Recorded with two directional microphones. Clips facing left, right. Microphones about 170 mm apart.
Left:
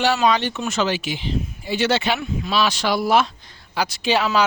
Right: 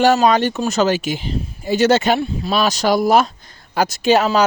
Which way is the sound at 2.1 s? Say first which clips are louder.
Right 3 dB; 35° right (ahead or behind).